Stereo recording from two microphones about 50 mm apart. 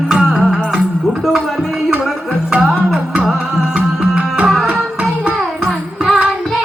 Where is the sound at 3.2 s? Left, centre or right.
Centre.